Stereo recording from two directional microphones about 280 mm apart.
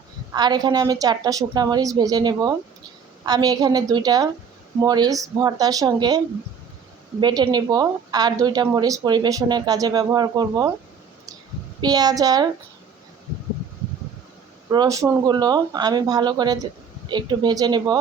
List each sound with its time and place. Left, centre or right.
0.3 s a woman's voice: centre
11.8 s a woman's voice: centre
14.7 s a woman's voice: centre